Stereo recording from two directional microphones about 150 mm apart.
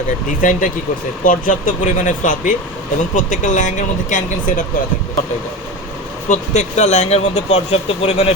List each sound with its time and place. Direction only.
0.3 s speech: 60° left (ahead or behind)
6.2 s speech: 50° left (ahead or behind)